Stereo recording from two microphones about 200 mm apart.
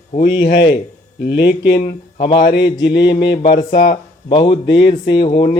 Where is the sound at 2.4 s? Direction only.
55° left (ahead or behind).